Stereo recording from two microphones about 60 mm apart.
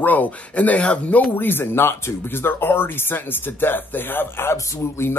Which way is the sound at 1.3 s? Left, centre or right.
Left.